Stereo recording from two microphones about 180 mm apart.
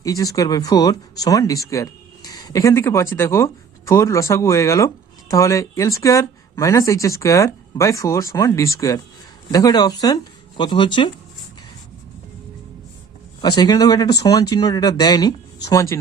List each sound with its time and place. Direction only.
0.0 s speech: 20° left (ahead or behind)
13.6 s speech: 20° left (ahead or behind)